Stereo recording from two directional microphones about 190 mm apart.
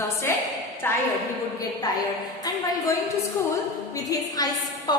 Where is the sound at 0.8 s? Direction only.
10° left (ahead or behind).